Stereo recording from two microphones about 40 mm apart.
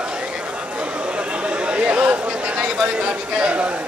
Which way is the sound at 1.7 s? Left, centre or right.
Right.